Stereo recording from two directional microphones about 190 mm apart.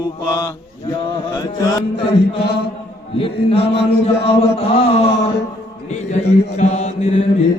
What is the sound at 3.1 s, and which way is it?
Mantra, 30° left (ahead or behind).